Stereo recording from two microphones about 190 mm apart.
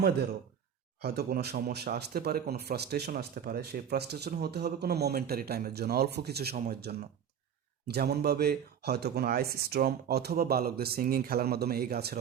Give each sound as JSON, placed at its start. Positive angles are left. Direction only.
{"t": 1.0, "sound": "speech", "side_deg": -55}